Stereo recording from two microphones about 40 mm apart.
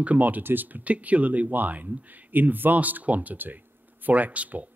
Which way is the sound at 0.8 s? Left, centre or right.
Right.